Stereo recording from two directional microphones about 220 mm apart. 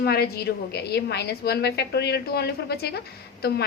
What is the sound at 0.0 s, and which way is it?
A woman's voice, 45° left (ahead or behind).